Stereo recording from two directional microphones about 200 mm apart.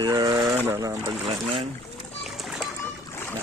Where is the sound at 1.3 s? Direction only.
30° right (ahead or behind).